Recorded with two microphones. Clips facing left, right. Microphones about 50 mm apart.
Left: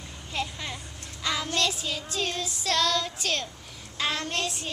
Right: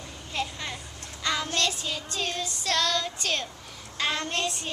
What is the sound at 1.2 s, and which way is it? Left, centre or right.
Child singing, centre.